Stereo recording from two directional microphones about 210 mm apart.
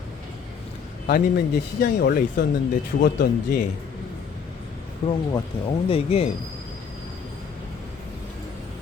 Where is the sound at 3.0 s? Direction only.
40° left (ahead or behind).